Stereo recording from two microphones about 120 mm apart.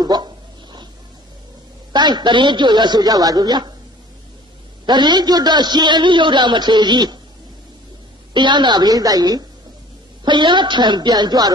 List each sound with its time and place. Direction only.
0.0 s a man's voice: 35° right (ahead or behind)
1.9 s a man's voice: 35° right (ahead or behind)
4.8 s a man's voice: 35° right (ahead or behind)
8.3 s a man's voice: 40° right (ahead or behind)